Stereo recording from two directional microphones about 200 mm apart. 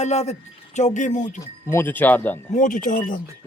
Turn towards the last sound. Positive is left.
turn(degrees=40)  # may be behind; listen again after turning